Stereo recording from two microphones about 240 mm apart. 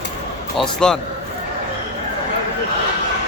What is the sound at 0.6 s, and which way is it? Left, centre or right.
Speech, centre.